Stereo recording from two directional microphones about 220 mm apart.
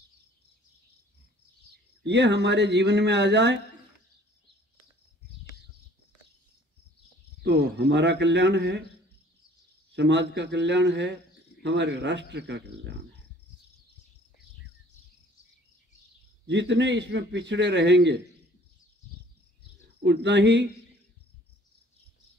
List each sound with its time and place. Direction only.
2.0 s a man's voice: 50° right (ahead or behind)
7.4 s a man's voice: 50° right (ahead or behind)
9.9 s a man's voice: 55° right (ahead or behind)
16.4 s a man's voice: 55° right (ahead or behind)
20.0 s a man's voice: 55° right (ahead or behind)